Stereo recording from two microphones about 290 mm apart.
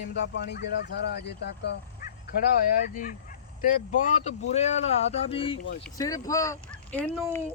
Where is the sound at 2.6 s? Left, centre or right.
Left.